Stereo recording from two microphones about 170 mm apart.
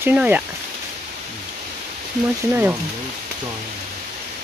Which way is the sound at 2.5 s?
10° right (ahead or behind).